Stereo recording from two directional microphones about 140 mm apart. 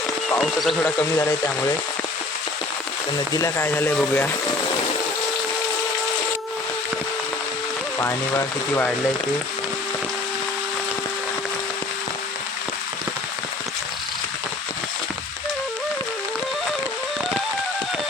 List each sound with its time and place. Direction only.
0.3 s speech: centre (ahead or behind)
3.3 s speech: 20° left (ahead or behind)
7.9 s speech: 20° left (ahead or behind)